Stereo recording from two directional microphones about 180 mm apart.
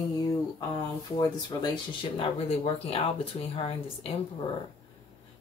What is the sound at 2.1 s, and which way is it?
Speech, 35° left (ahead or behind).